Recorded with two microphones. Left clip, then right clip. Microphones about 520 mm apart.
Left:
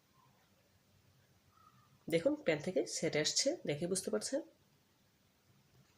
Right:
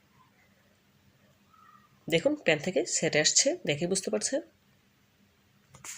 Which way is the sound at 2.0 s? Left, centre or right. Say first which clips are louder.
Right 8 dB; right.